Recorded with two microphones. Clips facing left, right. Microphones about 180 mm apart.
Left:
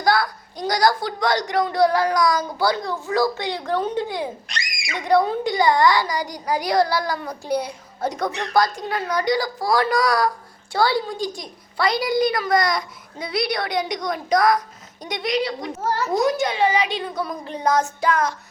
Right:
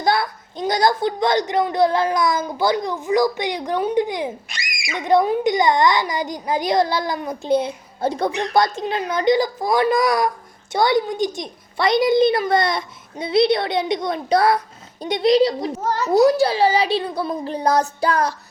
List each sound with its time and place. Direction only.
0.0 s a woman's voice: 25° right (ahead or behind)
4.4 s a sound: 5° right (ahead or behind)
4.9 s a woman's voice: 20° right (ahead or behind)
15.8 s a woman's voice: 20° right (ahead or behind)
16.2 s speech: 35° right (ahead or behind)